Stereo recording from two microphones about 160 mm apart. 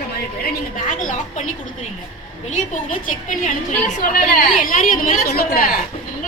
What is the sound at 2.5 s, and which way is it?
A woman's voice, 55° left (ahead or behind).